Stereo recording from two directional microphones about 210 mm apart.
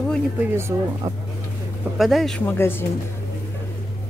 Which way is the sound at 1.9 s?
Centre (ahead or behind).